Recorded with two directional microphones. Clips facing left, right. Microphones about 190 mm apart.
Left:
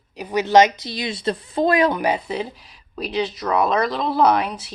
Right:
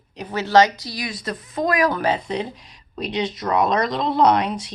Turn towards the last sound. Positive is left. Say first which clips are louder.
# right 1 dB
turn(degrees=5)  # may be behind; listen again after turning